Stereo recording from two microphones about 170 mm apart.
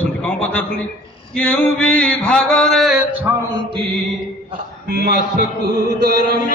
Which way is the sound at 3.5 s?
30° right (ahead or behind).